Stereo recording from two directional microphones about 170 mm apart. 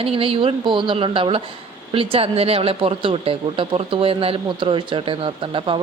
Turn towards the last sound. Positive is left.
turn(degrees=-30)  # may be behind; listen again after turning